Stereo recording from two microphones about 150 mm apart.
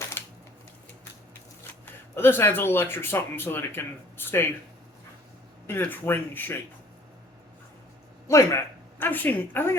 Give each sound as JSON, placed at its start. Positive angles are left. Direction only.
{"t": 0.2, "sound": "a sound", "side_deg": 15}
{"t": 1.8, "sound": "speech", "side_deg": 15}
{"t": 5.6, "sound": "speech", "side_deg": 15}
{"t": 8.3, "sound": "speech", "side_deg": 20}